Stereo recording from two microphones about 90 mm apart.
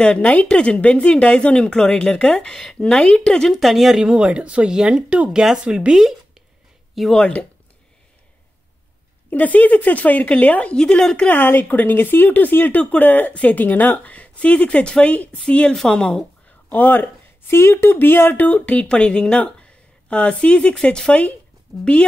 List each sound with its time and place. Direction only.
0.0 s speech: 15° left (ahead or behind); by 6.1 s 5° right (ahead or behind)
7.0 s speech: 5° left (ahead or behind)
9.3 s speech: 15° left (ahead or behind)
11.3 s speech: 25° left (ahead or behind)